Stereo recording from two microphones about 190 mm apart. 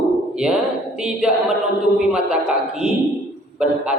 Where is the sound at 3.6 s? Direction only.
5° right (ahead or behind).